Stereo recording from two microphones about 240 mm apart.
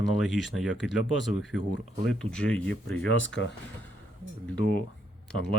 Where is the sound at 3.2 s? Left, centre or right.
Left.